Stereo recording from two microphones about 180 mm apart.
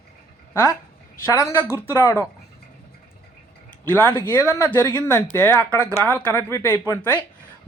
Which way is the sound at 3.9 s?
10° left (ahead or behind).